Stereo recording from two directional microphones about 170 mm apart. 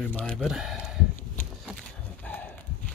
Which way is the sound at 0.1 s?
5° left (ahead or behind).